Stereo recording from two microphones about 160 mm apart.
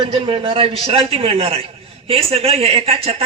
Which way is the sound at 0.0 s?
35° right (ahead or behind).